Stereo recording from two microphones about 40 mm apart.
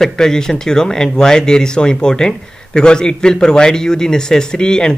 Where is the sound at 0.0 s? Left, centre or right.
Centre.